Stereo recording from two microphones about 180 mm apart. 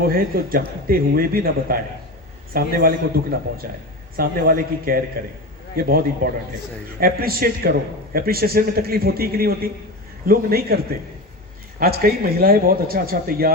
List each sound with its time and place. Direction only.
0.1 s a man's voice: 55° right (ahead or behind)
11.8 s a man's voice: 55° right (ahead or behind)